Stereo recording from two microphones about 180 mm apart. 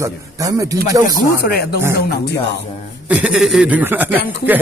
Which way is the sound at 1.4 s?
60° left (ahead or behind).